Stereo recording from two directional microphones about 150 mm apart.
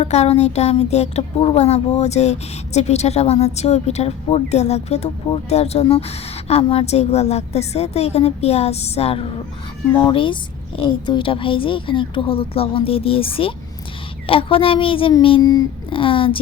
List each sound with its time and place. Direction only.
0.0 s speech: 45° left (ahead or behind)
9.8 s speech: 15° left (ahead or behind)
10.1 s a woman's voice: 35° left (ahead or behind)
15.4 s a sound: 25° left (ahead or behind)
15.9 s a woman's voice: 35° left (ahead or behind)